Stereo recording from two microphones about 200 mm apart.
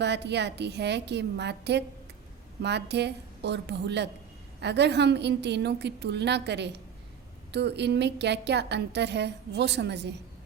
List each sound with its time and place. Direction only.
0.0 s a woman's voice: 60° right (ahead or behind)